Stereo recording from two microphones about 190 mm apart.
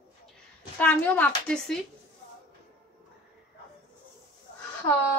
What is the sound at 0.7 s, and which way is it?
Speech, 10° left (ahead or behind).